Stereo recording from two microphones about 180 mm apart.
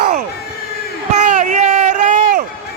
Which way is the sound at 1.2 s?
45° right (ahead or behind).